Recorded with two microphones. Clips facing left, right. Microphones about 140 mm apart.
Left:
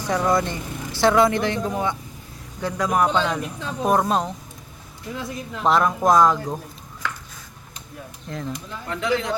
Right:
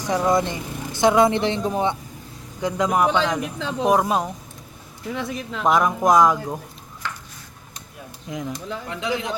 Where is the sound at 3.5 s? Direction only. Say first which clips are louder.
Right 3 dB; 90° right.